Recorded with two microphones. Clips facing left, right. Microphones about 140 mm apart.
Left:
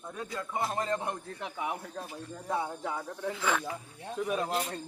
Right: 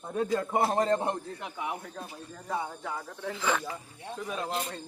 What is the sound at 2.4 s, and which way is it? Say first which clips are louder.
Speech: left 1 dB; 15° left (ahead or behind).